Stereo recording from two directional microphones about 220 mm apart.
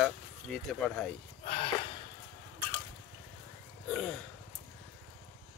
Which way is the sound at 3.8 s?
Centre (ahead or behind).